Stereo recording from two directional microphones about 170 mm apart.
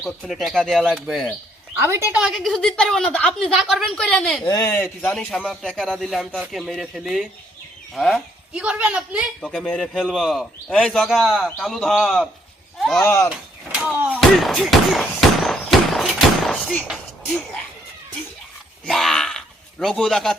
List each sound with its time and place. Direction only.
0.0 s a woman's voice: centre (ahead or behind)
4.4 s speech: 20° left (ahead or behind)
5.1 s a woman's voice: centre (ahead or behind)
9.4 s a woman's voice: 5° left (ahead or behind)
13.0 s speech: 15° left (ahead or behind)
13.7 s speech: 5° right (ahead or behind)
15.4 s a sound: centre (ahead or behind)
18.9 s a sound: centre (ahead or behind)